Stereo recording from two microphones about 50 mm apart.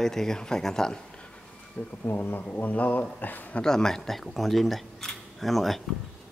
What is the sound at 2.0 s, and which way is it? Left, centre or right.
Speech, left.